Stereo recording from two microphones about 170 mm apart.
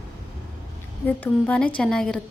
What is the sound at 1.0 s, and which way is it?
A woman's voice, 10° left (ahead or behind).